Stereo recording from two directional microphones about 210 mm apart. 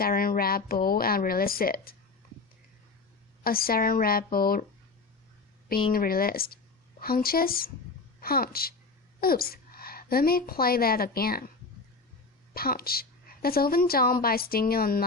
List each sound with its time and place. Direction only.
0.0 s a woman's voice: 45° left (ahead or behind)
3.4 s a woman's voice: 45° left (ahead or behind)
5.9 s a woman's voice: 45° left (ahead or behind)
12.5 s a woman's voice: 45° left (ahead or behind)